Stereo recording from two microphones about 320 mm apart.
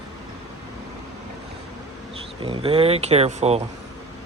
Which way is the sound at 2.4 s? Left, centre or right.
Centre.